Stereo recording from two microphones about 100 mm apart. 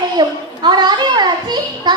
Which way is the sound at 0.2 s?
45° right (ahead or behind).